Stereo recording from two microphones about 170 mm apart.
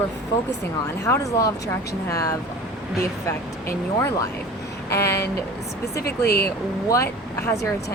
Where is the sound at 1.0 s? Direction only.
20° left (ahead or behind).